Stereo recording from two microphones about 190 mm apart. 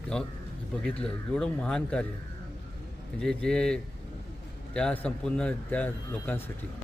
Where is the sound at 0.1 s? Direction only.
5° left (ahead or behind).